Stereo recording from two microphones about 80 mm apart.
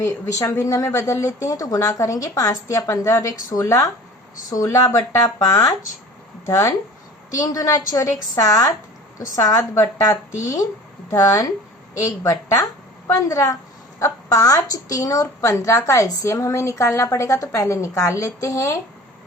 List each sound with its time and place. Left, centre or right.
0.0 s a woman's voice: left